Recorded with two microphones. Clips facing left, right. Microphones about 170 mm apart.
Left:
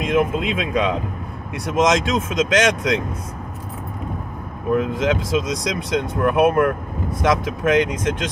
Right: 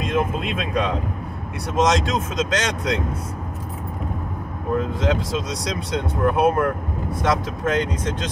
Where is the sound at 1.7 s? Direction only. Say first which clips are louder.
Left 2 dB; 90° left.